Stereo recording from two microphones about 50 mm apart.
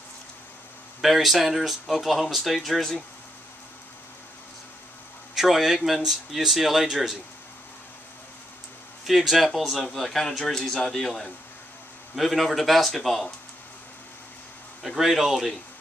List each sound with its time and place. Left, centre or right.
1.0 s speech: centre
5.3 s speech: centre
9.0 s speech: centre
15.0 s speech: centre